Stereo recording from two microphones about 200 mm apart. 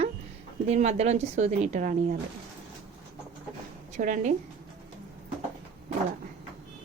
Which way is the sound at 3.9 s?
40° right (ahead or behind).